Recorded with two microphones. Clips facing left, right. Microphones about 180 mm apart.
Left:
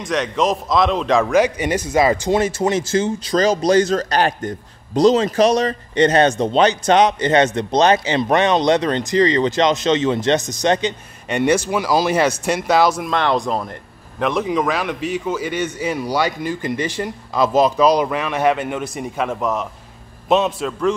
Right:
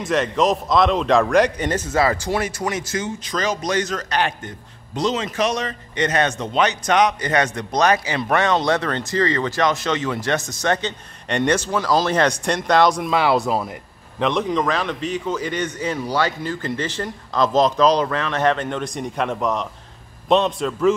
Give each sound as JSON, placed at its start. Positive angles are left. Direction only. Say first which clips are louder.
{"t": 0.0, "sound": "a man's voice", "louder": "even", "side_deg": 0}